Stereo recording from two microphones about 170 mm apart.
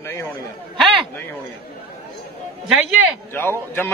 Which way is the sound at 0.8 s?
Centre (ahead or behind).